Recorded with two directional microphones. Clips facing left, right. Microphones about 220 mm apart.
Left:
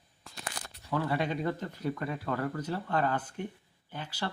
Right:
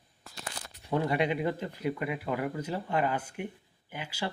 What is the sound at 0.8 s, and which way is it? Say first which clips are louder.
Speech: right 3 dB; 20° right (ahead or behind).